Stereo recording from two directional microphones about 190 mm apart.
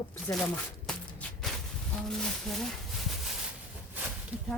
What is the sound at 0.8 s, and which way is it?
Shuffle, 5° left (ahead or behind).